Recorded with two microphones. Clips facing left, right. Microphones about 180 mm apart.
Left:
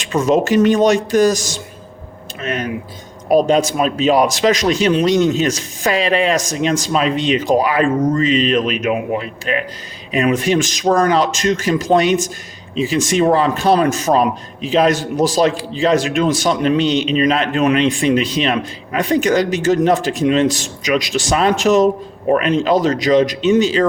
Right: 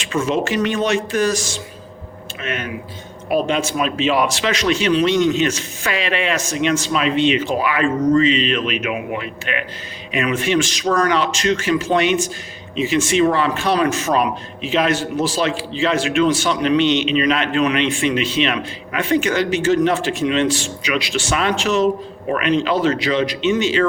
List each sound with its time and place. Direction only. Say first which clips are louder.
0.0 s a man's voice: left 5 dB; 40° left (ahead or behind)